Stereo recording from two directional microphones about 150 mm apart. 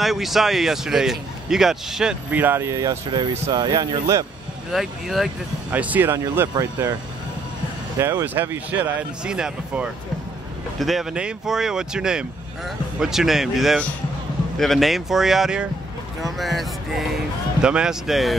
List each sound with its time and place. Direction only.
0.0 s speech: centre (ahead or behind); by 4.3 s 25° right (ahead or behind)
4.7 s speech: centre (ahead or behind); by 7.0 s 20° right (ahead or behind)
8.0 s speech: 15° right (ahead or behind)